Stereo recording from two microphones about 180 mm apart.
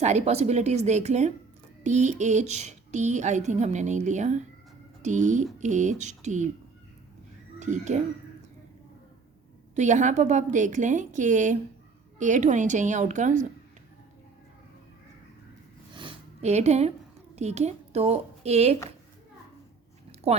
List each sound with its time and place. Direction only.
0.0 s a woman's voice: 40° right (ahead or behind)
7.6 s a woman's voice: 40° right (ahead or behind)
9.7 s a woman's voice: 40° right (ahead or behind)
15.9 s a sound: 25° right (ahead or behind)
17.3 s a woman's voice: 35° right (ahead or behind)
20.3 s speech: 35° right (ahead or behind)